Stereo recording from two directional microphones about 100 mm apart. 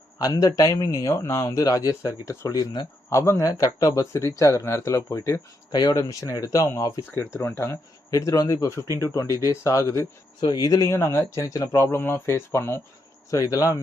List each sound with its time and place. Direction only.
0.2 s speech: 40° left (ahead or behind)
5.7 s speech: 45° left (ahead or behind)
7.1 s speech: 25° left (ahead or behind)
13.3 s speech: 35° left (ahead or behind)